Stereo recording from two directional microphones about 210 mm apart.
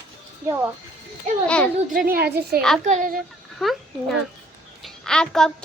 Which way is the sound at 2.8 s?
35° right (ahead or behind).